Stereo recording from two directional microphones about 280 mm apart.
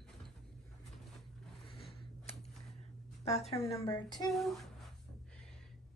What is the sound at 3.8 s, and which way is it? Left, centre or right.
Speech, centre.